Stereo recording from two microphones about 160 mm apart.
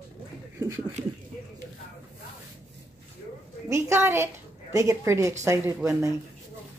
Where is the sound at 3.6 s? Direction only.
15° right (ahead or behind).